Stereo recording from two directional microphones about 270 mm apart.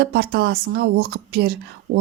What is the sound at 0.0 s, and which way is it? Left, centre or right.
Speech, right.